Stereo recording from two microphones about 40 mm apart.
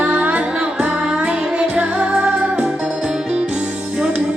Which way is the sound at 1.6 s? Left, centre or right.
Right.